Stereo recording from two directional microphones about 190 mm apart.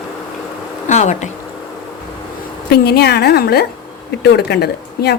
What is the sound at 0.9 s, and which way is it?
Speech, 40° left (ahead or behind).